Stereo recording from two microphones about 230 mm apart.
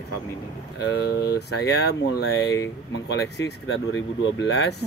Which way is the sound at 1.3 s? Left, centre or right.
Left.